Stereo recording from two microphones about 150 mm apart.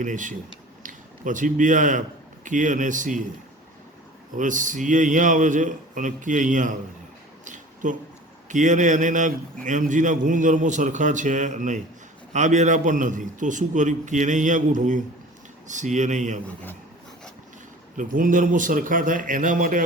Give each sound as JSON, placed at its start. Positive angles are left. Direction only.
{"t": 0.0, "sound": "a man's voice", "side_deg": -60}
{"t": 4.4, "sound": "a man's voice", "side_deg": -60}
{"t": 7.4, "sound": "a sound", "side_deg": -55}
{"t": 8.4, "sound": "a man's voice", "side_deg": -55}
{"t": 17.9, "sound": "a man's voice", "side_deg": -60}